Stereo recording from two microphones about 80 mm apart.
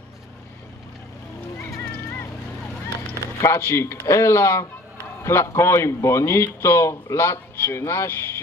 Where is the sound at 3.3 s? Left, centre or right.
Left.